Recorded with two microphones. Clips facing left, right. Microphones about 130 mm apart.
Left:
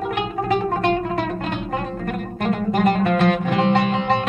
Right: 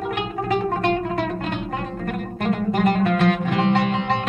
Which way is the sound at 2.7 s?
30° left (ahead or behind).